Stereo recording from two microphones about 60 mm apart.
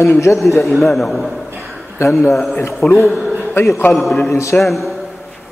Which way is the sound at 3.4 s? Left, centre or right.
Left.